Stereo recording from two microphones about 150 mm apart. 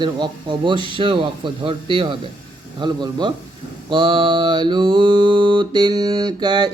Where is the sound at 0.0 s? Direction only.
30° right (ahead or behind).